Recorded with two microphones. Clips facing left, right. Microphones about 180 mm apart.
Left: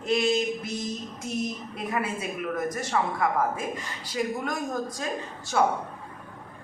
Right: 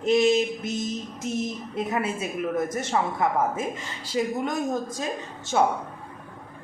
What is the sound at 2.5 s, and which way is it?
Speech, 25° right (ahead or behind).